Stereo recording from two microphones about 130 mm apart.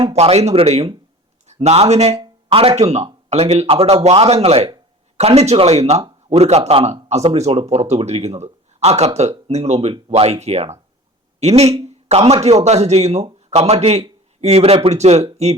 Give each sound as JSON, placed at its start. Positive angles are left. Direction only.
{"t": 0.1, "sound": "a man's voice", "side_deg": -55}